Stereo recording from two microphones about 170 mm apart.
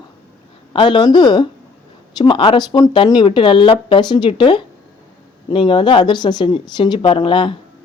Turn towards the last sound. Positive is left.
turn(degrees=30)  # may be behind; listen again after turning